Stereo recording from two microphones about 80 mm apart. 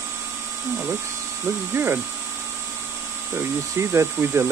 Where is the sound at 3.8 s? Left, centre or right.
Right.